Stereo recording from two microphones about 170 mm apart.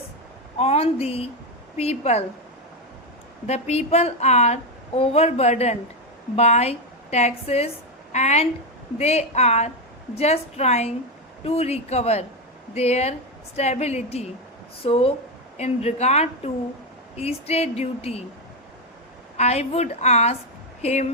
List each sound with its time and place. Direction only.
0.6 s a woman's voice: 35° left (ahead or behind)
3.4 s a woman's voice: 40° left (ahead or behind)
19.4 s a woman's voice: 40° left (ahead or behind)